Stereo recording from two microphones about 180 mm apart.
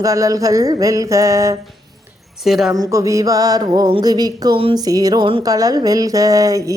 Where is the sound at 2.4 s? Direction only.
Centre (ahead or behind).